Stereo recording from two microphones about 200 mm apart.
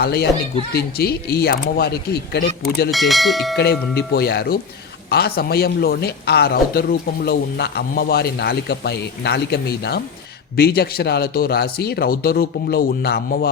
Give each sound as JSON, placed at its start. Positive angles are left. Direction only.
{"t": 0.0, "sound": "a man's voice", "side_deg": 50}
{"t": 2.9, "sound": "speech", "side_deg": 0}
{"t": 3.6, "sound": "a man's voice", "side_deg": 55}